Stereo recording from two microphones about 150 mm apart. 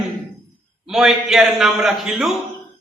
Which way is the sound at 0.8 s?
Centre (ahead or behind).